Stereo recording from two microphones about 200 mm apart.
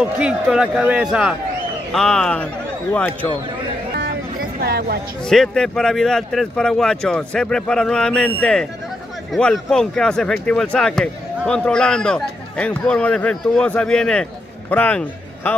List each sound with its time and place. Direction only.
0.0 s speech: 5° right (ahead or behind)
4.6 s speech: 55° right (ahead or behind)
5.2 s a man's voice: 5° left (ahead or behind)